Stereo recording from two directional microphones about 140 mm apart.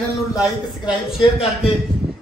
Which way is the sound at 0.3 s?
25° left (ahead or behind).